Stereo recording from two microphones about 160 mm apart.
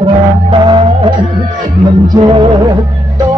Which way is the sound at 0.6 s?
30° right (ahead or behind).